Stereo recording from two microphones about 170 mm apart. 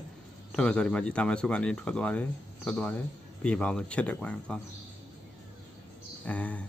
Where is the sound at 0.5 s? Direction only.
5° left (ahead or behind).